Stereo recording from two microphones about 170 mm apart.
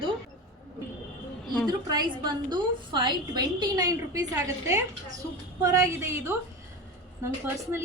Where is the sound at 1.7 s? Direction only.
25° right (ahead or behind).